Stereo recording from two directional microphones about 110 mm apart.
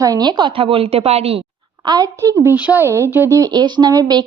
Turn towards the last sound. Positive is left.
turn(degrees=-35)  # may be behind; listen again after turning